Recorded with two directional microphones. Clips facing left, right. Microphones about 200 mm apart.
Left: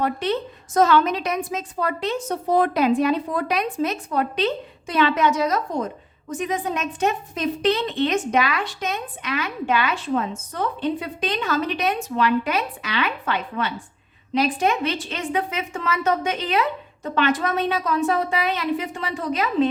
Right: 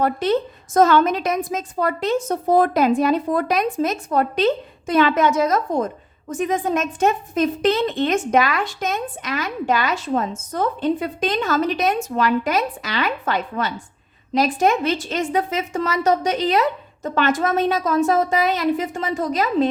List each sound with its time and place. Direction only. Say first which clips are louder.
0.0 s a woman's voice: right 4 dB; 45° right (ahead or behind)